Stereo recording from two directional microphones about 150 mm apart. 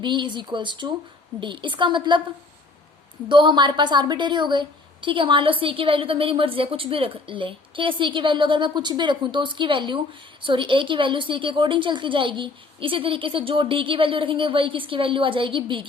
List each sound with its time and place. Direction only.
0.0 s a woman's voice: 30° right (ahead or behind)
3.2 s a woman's voice: 30° right (ahead or behind)